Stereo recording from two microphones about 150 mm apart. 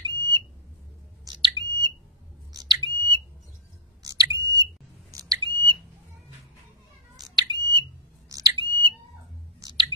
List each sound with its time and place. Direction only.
0.0 s smoke detector: 30° right (ahead or behind)
5.3 s smoke detector: 35° right (ahead or behind)
7.2 s smoke detector: 25° right (ahead or behind)
9.6 s chewing: 30° right (ahead or behind)